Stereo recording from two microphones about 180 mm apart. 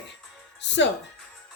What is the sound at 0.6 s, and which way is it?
Speech, 80° left.